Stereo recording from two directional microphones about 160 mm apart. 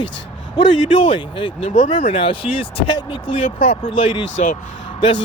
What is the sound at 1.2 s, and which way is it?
Speech, 30° left (ahead or behind).